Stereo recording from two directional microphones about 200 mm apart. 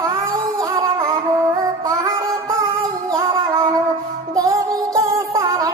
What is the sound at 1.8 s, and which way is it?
Music, 15° right (ahead or behind).